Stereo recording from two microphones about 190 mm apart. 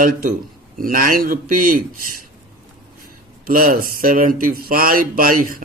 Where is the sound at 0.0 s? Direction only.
45° right (ahead or behind).